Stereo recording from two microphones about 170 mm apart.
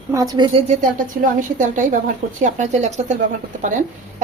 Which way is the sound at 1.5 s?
45° right (ahead or behind).